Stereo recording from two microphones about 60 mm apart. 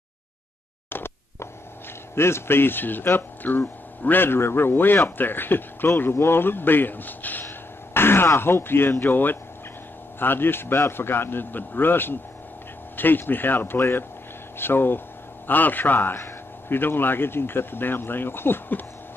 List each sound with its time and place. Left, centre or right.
0.8 s a sound: left
2.1 s speech: left
7.4 s speech: left